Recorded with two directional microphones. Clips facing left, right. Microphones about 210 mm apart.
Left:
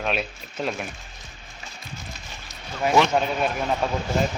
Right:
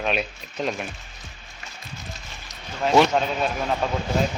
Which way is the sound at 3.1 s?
5° left (ahead or behind).